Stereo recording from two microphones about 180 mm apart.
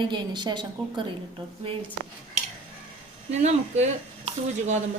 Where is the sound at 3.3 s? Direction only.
40° right (ahead or behind).